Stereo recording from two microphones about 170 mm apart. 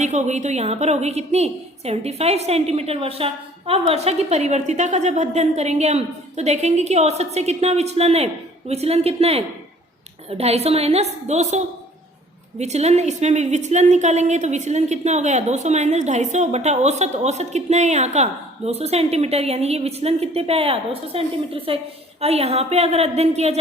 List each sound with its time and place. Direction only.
0.0 s a woman's voice: 45° right (ahead or behind)